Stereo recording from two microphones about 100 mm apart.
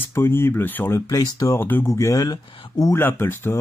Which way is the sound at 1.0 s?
35° left (ahead or behind).